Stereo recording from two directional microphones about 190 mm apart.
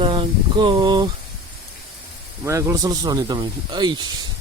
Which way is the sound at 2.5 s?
15° right (ahead or behind).